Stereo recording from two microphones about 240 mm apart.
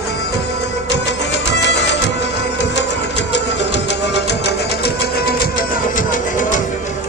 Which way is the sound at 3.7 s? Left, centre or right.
Left.